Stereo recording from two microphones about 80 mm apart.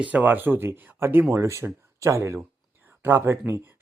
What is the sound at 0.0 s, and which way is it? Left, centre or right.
Speech, right.